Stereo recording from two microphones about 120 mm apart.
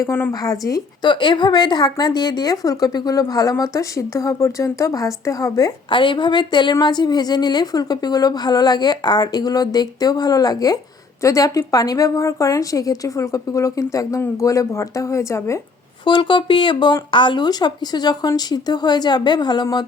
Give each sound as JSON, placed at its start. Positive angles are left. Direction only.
{"t": 0.1, "sound": "speech", "side_deg": 15}
{"t": 0.4, "sound": "a woman's voice", "side_deg": 30}
{"t": 5.9, "sound": "a woman's voice", "side_deg": 45}
{"t": 16.0, "sound": "a woman's voice", "side_deg": 40}